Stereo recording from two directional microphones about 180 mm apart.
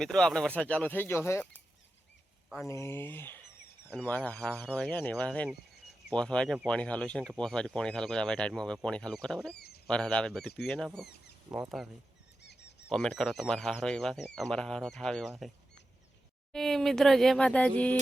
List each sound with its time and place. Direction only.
0.0 s speech: centre (ahead or behind)
2.6 s speech: 15° left (ahead or behind)
9.6 s a sound: 60° left (ahead or behind)
9.8 s speech: 5° left (ahead or behind)
11.4 s speech: 15° right (ahead or behind)
12.4 s a sound: 70° left (ahead or behind)
12.9 s speech: 5° left (ahead or behind)